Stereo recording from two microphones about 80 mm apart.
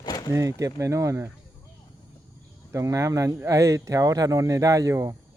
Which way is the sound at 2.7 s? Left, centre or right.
Right.